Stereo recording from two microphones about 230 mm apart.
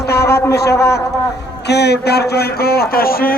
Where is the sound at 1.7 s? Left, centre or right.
Left.